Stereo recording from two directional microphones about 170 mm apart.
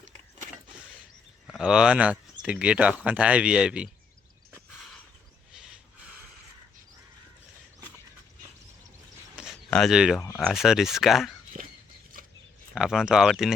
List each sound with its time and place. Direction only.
1.5 s speech: 5° right (ahead or behind)
9.6 s speech: 5° left (ahead or behind)
11.6 s a sound: 45° right (ahead or behind)
12.7 s speech: 5° right (ahead or behind)